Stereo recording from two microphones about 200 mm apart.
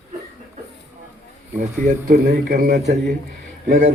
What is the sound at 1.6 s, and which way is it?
Speech, 40° right (ahead or behind).